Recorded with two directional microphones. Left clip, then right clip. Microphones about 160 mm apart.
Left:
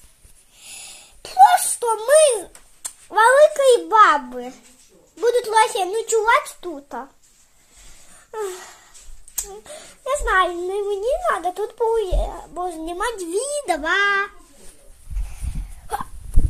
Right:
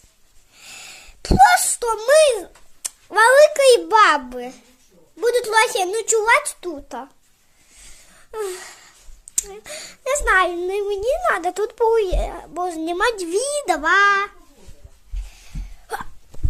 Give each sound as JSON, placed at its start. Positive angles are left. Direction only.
{"t": 0.6, "sound": "sneeze", "side_deg": -25}
{"t": 1.8, "sound": "a child's voice", "side_deg": -25}
{"t": 8.1, "sound": "a sound", "side_deg": -10}
{"t": 9.5, "sound": "a child's voice", "side_deg": -20}
{"t": 15.9, "sound": "hiccup", "side_deg": -15}